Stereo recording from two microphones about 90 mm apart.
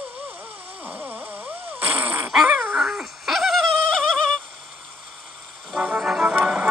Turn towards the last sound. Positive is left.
turn(degrees=0)  # may be behind; listen again after turning